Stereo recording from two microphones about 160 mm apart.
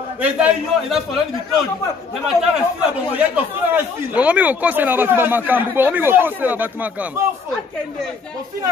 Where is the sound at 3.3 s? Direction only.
10° right (ahead or behind).